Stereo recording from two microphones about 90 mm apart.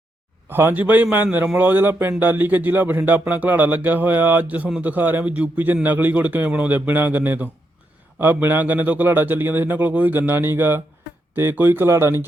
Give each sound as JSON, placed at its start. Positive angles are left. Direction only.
{"t": 0.4, "sound": "speech", "side_deg": -25}